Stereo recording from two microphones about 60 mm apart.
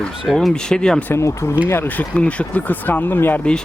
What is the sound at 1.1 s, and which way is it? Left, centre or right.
Speech, left.